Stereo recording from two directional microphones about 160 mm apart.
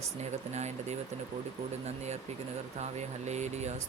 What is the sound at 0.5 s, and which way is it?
Speech, 45° right (ahead or behind).